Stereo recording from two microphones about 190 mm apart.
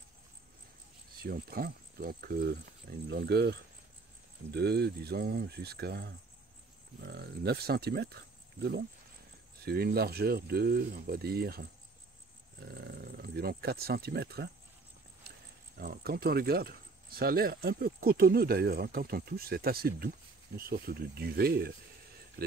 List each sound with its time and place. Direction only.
1.2 s speech: 50° right (ahead or behind)
9.7 s speech: 55° right (ahead or behind)
12.8 s speech: 55° right (ahead or behind)
15.8 s speech: 55° right (ahead or behind)